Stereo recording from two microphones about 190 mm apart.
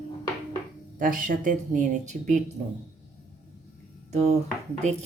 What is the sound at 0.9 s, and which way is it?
Speech, 45° right (ahead or behind).